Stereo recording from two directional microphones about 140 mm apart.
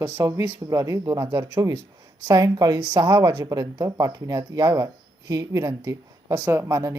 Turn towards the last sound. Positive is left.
turn(degrees=-20)  # may be behind; listen again after turning